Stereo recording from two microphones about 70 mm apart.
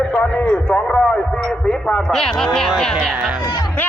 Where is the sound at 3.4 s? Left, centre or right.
Left.